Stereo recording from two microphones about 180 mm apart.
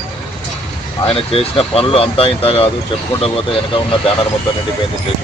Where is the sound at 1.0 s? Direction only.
30° left (ahead or behind).